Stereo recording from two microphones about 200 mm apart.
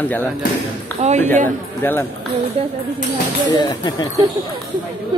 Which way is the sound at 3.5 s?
20° left (ahead or behind).